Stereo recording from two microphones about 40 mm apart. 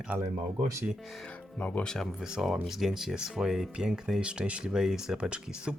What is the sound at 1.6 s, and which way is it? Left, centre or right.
Speech, left.